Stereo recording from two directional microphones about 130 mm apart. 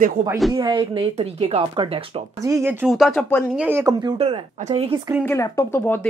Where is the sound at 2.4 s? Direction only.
20° right (ahead or behind).